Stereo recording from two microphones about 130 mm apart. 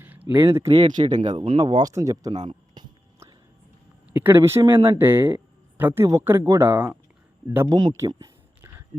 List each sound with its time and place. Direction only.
0.3 s speech: 20° right (ahead or behind)
1.0 s speech: 65° right (ahead or behind)
1.3 s speech: 35° right (ahead or behind)
1.9 s speech: 25° right (ahead or behind)
4.1 s speech: 15° right (ahead or behind)
7.7 s speech: 35° right (ahead or behind)
7.9 s a sound: 25° right (ahead or behind)